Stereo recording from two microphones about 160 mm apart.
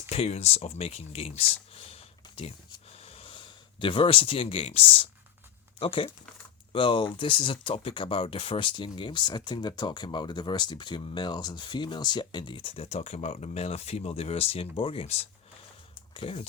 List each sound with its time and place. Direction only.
0.1 s speech: 40° left (ahead or behind)